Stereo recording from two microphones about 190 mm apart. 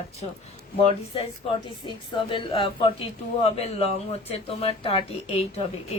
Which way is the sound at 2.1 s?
25° left (ahead or behind).